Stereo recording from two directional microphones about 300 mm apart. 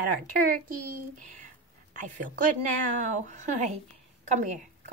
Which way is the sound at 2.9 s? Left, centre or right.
Right.